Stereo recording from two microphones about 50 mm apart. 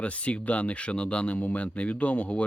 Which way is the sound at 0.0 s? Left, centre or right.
Left.